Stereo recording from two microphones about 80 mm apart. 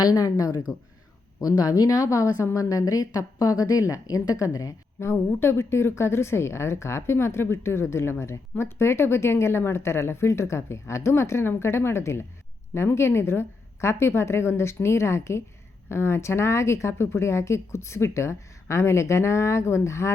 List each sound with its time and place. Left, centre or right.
0.0 s a woman's voice: left
5.0 s speech: left